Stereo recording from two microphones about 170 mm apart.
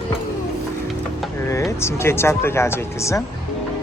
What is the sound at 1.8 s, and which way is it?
Speech, 15° left (ahead or behind).